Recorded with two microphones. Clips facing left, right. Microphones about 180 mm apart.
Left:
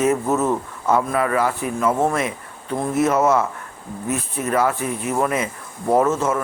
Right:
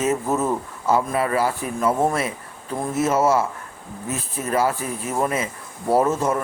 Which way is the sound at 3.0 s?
25° right (ahead or behind).